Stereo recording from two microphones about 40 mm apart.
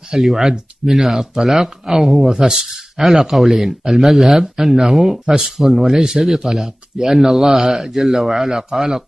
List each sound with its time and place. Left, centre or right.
0.2 s speech: centre
8.5 s speech: centre